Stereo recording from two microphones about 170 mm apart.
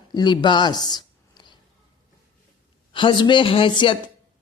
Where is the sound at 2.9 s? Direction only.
30° left (ahead or behind).